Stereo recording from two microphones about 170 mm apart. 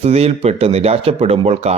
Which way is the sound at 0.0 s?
40° right (ahead or behind).